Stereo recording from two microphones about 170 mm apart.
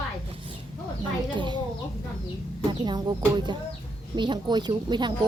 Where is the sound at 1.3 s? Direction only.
25° right (ahead or behind).